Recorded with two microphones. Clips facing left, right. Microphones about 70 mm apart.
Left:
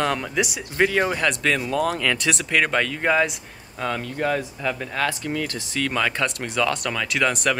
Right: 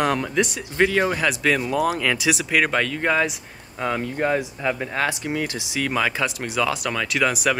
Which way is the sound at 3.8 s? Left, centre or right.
Centre.